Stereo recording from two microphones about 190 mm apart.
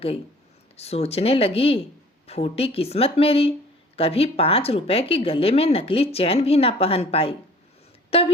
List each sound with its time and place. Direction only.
0.8 s speech: 35° left (ahead or behind)